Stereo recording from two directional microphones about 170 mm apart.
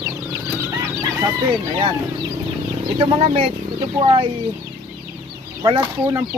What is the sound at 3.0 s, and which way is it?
Speech, 35° right (ahead or behind).